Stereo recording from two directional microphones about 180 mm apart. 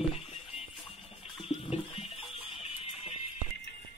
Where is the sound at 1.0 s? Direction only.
35° left (ahead or behind).